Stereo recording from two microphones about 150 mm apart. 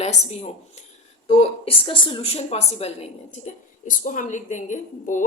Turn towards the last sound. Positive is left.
turn(degrees=55)  # may be behind; listen again after turning